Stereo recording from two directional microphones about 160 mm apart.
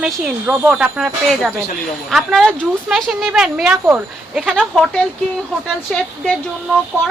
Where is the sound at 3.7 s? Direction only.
15° right (ahead or behind).